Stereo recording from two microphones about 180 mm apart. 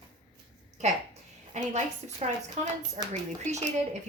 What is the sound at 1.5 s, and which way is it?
A woman's voice, 40° right (ahead or behind).